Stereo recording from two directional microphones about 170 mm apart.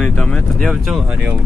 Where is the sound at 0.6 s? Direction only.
10° right (ahead or behind).